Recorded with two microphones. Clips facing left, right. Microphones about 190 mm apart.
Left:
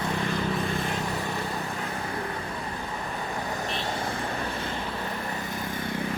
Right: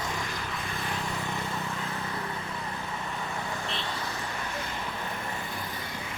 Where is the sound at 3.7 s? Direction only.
50° left (ahead or behind).